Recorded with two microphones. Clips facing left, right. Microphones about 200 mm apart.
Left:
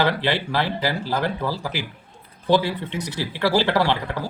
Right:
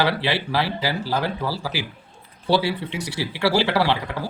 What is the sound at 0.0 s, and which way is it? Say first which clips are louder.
Speech: left 1 dB; 10° right (ahead or behind).